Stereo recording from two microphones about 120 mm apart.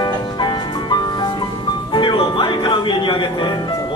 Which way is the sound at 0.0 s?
40° left (ahead or behind).